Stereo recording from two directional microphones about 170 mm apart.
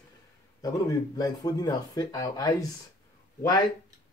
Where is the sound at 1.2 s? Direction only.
20° left (ahead or behind).